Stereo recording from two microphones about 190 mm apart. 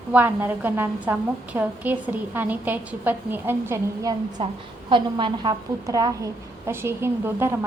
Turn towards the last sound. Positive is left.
turn(degrees=-10)  # may be behind; listen again after turning